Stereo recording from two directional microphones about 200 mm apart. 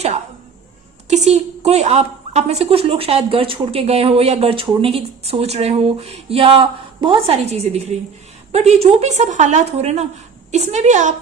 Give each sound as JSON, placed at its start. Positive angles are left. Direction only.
{"t": 1.0, "sound": "a woman's voice", "side_deg": -35}